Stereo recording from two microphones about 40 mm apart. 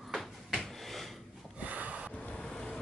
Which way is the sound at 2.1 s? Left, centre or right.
Left.